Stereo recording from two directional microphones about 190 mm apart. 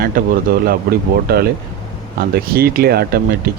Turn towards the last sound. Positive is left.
turn(degrees=-55)  # may be behind; listen again after turning